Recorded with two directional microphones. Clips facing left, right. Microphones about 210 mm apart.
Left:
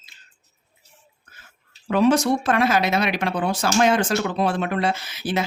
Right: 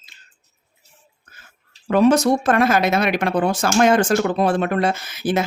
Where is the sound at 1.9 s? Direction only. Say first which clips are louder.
Right 3 dB; 45° right (ahead or behind).